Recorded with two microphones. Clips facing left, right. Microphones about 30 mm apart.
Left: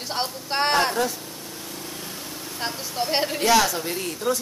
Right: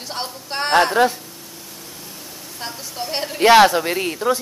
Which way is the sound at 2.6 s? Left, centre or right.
Centre.